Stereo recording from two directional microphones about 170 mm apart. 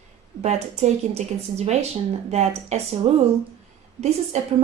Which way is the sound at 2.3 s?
40° right (ahead or behind).